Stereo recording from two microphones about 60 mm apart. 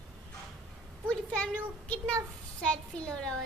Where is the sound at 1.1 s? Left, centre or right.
Centre.